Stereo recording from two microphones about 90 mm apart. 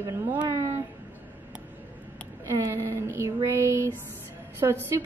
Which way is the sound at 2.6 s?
25° right (ahead or behind).